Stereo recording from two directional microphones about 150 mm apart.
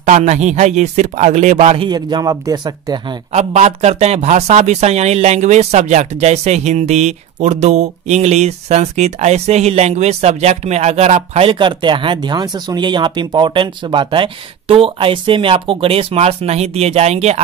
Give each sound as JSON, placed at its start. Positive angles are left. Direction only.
{"t": 0.0, "sound": "speech", "side_deg": -50}
{"t": 1.9, "sound": "speech", "side_deg": -30}
{"t": 3.3, "sound": "speech", "side_deg": -50}